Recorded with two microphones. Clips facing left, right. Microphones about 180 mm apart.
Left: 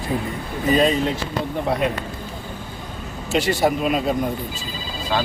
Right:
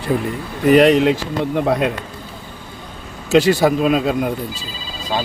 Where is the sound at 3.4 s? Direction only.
90° right.